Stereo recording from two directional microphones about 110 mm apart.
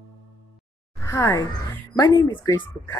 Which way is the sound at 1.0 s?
25° left (ahead or behind).